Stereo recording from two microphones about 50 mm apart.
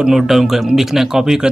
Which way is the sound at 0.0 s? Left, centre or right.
Centre.